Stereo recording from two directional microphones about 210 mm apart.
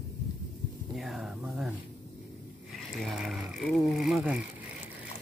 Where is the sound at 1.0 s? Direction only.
Centre (ahead or behind).